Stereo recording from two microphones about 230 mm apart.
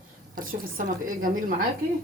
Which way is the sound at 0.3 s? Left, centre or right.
Right.